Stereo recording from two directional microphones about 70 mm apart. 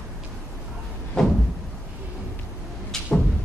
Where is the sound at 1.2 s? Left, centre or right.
Centre.